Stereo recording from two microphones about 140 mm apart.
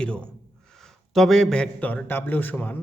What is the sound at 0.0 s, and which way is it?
A man's voice, 5° left (ahead or behind).